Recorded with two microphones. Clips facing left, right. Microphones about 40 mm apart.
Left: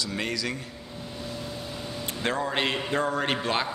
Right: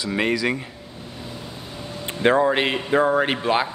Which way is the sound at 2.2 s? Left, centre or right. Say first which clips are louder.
Right 10 dB; right.